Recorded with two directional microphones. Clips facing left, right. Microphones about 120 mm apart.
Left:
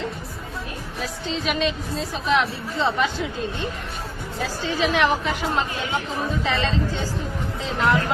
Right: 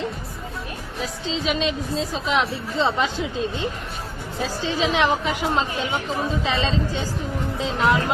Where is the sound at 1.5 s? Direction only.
20° right (ahead or behind).